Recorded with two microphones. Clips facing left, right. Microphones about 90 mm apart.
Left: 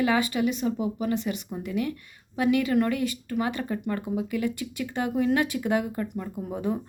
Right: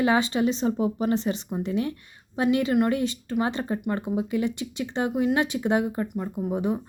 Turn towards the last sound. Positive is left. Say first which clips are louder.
# right 3 dB
turn(degrees=-20)  # may be behind; listen again after turning